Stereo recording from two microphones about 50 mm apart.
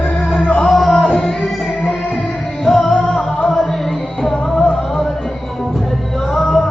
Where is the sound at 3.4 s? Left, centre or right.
Centre.